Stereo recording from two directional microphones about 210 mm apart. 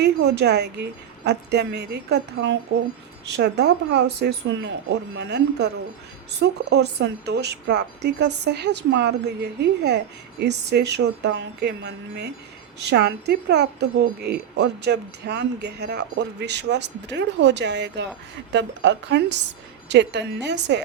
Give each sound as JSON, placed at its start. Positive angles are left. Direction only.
{"t": 0.3, "sound": "speech", "side_deg": -50}